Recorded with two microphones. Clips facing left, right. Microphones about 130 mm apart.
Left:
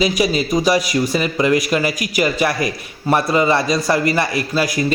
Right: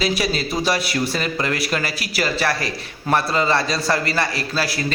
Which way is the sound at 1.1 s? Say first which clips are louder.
Left 7 dB; 10° left (ahead or behind).